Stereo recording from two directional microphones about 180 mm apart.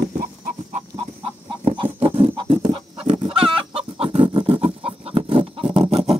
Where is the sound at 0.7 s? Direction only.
30° right (ahead or behind).